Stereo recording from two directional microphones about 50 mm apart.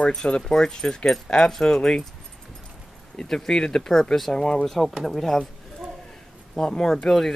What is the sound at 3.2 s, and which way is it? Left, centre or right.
Speech, centre.